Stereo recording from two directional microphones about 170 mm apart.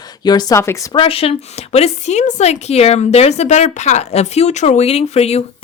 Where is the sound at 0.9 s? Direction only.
35° left (ahead or behind).